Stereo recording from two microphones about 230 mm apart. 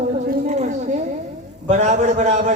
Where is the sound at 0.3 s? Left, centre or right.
Right.